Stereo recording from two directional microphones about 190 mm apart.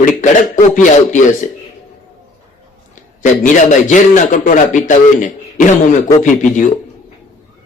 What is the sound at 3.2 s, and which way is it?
A man's voice, 40° left (ahead or behind).